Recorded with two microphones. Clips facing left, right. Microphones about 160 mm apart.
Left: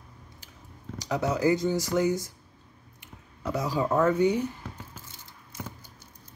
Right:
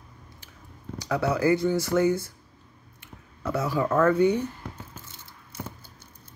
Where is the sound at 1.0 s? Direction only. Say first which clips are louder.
Right 1 dB; 20° left (ahead or behind).